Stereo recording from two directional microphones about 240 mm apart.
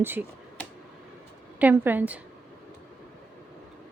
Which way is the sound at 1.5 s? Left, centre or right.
Centre.